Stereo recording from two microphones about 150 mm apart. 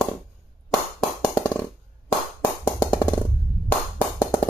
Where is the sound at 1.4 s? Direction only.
10° left (ahead or behind).